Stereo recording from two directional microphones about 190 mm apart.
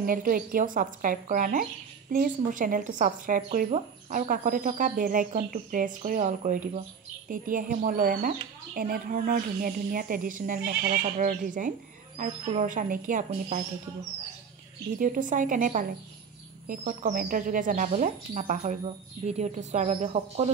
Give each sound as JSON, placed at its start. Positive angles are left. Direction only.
{"t": 0.0, "sound": "speech", "side_deg": -45}
{"t": 15.0, "sound": "speech", "side_deg": -45}